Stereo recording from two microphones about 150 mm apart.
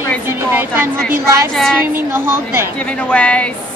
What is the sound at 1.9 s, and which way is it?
Speech, 15° right (ahead or behind).